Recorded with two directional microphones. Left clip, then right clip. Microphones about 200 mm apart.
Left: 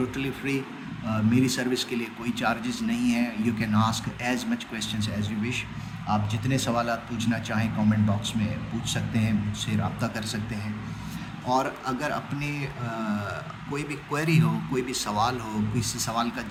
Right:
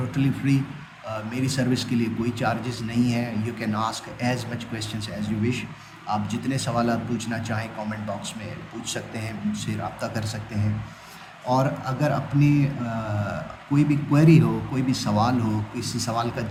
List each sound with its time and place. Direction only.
0.1 s a man's voice: 15° left (ahead or behind)